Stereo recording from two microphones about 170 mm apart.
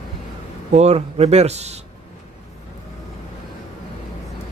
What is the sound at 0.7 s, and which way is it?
Speech, 40° right (ahead or behind).